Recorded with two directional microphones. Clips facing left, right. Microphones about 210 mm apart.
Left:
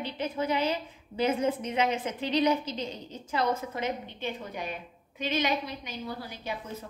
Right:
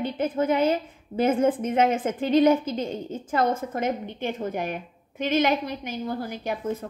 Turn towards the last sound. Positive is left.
turn(degrees=-50)  # may be behind; listen again after turning